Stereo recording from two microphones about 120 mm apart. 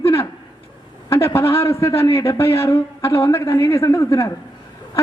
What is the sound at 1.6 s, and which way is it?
Speech, 20° left (ahead or behind).